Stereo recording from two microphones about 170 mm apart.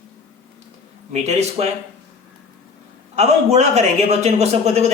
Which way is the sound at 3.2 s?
40° right (ahead or behind).